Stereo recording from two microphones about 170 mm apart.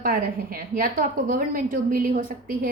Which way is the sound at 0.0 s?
60° right (ahead or behind).